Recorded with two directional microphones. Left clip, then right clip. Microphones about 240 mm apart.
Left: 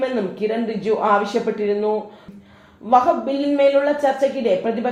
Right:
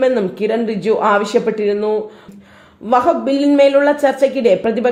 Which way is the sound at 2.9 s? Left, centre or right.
Right.